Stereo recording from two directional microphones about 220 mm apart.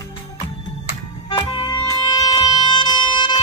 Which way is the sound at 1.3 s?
20° left (ahead or behind).